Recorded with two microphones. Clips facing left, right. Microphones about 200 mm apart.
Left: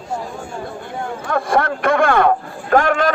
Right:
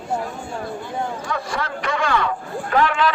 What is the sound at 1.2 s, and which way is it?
Speech, 55° left (ahead or behind).